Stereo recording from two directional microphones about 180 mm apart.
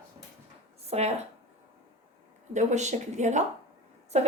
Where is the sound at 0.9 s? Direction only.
35° right (ahead or behind).